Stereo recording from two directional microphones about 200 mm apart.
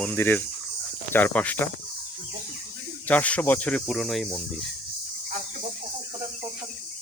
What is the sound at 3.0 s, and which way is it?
Cricket, 5° left (ahead or behind).